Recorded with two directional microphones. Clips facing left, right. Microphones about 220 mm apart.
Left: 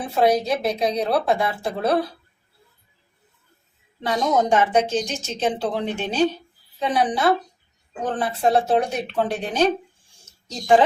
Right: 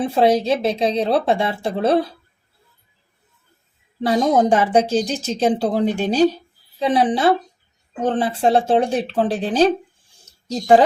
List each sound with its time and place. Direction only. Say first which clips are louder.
0.0 s speech: right 3 dB; 25° right (ahead or behind)
4.0 s speech: right 5 dB; 35° right (ahead or behind)